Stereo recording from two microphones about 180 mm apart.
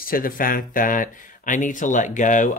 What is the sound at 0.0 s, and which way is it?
Speech, 50° left (ahead or behind).